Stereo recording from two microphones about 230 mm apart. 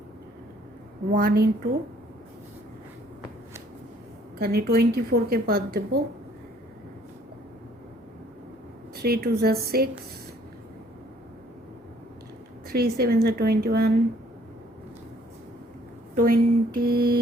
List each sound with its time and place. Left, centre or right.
1.1 s a woman's voice: right
4.4 s a woman's voice: right
9.0 s a woman's voice: right
12.6 s a woman's voice: right
16.1 s a woman's voice: right